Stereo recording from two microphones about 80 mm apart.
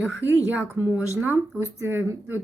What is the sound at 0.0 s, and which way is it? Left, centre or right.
Speech, right.